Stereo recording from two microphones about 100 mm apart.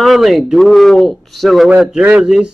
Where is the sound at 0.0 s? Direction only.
Centre (ahead or behind).